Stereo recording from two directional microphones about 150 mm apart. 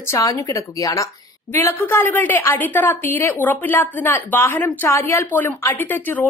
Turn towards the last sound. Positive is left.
turn(degrees=15)  # may be behind; listen again after turning